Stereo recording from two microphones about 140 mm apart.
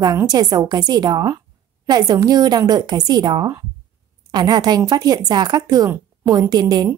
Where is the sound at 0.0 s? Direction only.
25° right (ahead or behind).